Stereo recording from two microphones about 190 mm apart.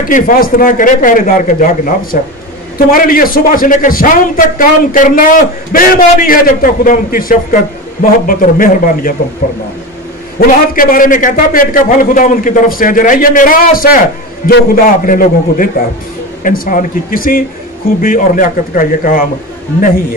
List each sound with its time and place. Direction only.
0.1 s a man's voice: 50° left (ahead or behind)
10.4 s a man's voice: 50° left (ahead or behind)